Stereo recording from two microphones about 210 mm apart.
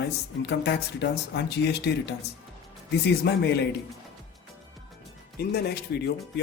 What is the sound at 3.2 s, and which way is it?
Speech, 50° left (ahead or behind).